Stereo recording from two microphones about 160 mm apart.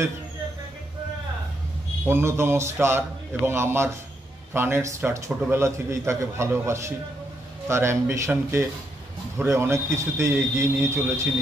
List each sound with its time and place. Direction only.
2.0 s speech: 15° right (ahead or behind)